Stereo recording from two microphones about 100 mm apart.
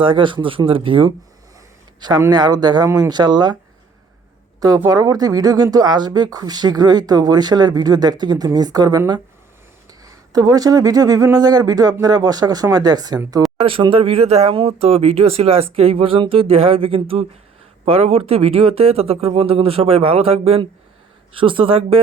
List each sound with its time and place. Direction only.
0.0 s speech: 55° right (ahead or behind)
2.0 s a man's voice: 45° right (ahead or behind)
4.9 s speech: 40° right (ahead or behind)
13.6 s speech: 65° right (ahead or behind)
17.8 s speech: 80° right
21.3 s speech: 60° right (ahead or behind)